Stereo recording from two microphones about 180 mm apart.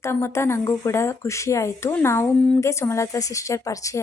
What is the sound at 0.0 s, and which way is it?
A woman's voice, 15° left (ahead or behind).